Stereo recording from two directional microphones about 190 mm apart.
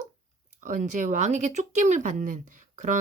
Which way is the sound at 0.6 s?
40° right (ahead or behind).